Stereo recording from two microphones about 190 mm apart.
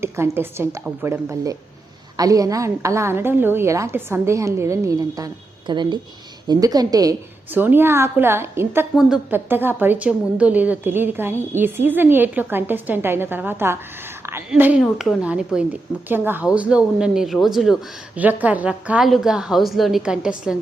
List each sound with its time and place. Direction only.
0.0 s a woman's voice: 15° right (ahead or behind)